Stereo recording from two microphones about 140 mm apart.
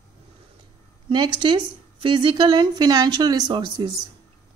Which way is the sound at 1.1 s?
35° right (ahead or behind).